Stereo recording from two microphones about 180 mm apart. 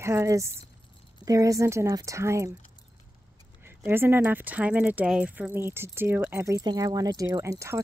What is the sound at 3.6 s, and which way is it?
Speech, 10° right (ahead or behind).